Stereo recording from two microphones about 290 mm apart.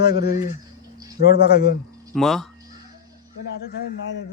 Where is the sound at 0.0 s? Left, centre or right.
Left.